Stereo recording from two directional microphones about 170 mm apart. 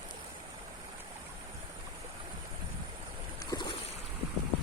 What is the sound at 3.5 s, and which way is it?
Boat, 25° left (ahead or behind).